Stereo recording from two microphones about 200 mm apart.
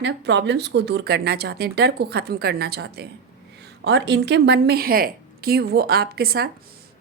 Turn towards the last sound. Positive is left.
turn(degrees=-50)  # may be behind; listen again after turning